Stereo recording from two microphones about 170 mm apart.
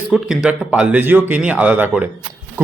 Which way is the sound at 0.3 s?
5° right (ahead or behind).